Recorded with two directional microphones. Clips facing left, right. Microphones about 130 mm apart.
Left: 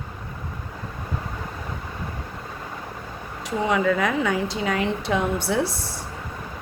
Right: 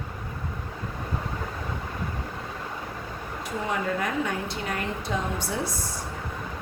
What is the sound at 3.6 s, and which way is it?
A woman's voice, 90° left.